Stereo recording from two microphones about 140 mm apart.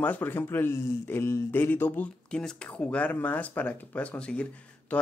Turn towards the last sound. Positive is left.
turn(degrees=10)  # may be behind; listen again after turning